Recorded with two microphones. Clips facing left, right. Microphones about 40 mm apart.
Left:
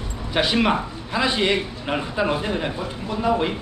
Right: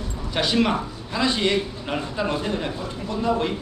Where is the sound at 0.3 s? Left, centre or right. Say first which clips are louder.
Left 2 dB; centre.